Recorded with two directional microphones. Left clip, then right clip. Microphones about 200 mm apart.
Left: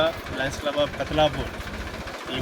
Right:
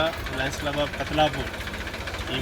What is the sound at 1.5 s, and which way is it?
Vehicle, 55° left (ahead or behind).